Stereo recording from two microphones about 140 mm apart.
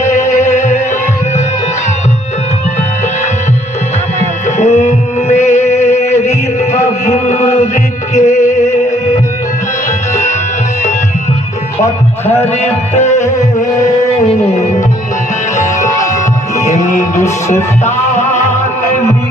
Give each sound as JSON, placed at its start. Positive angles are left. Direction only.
{"t": 0.3, "sound": "music", "side_deg": 55}
{"t": 4.4, "sound": "music", "side_deg": 55}
{"t": 10.1, "sound": "music", "side_deg": 55}
{"t": 12.2, "sound": "music", "side_deg": 15}
{"t": 12.5, "sound": "music", "side_deg": 55}
{"t": 15.5, "sound": "music", "side_deg": 60}
{"t": 15.9, "sound": "music", "side_deg": 25}
{"t": 16.6, "sound": "music", "side_deg": 60}